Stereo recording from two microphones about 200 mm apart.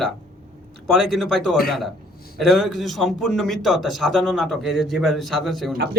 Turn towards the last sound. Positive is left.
turn(degrees=0)  # may be behind; listen again after turning